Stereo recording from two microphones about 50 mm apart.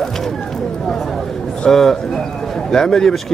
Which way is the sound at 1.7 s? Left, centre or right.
Centre.